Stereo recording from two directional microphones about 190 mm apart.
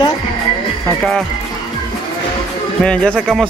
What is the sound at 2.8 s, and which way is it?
Speech, 5° left (ahead or behind).